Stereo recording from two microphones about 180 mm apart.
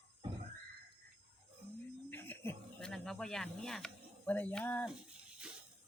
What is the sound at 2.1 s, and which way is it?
Speech, 10° left (ahead or behind).